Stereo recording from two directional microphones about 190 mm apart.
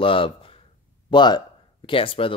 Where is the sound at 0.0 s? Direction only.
25° left (ahead or behind).